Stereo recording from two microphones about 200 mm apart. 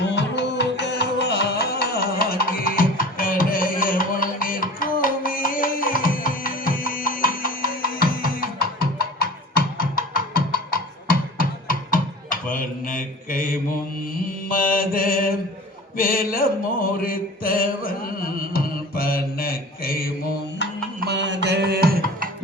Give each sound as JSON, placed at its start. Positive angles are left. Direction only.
{"t": 0.1, "sound": "music", "side_deg": 60}
{"t": 14.3, "sound": "mantra", "side_deg": 45}
{"t": 17.6, "sound": "music", "side_deg": 45}
{"t": 21.0, "sound": "music", "side_deg": -60}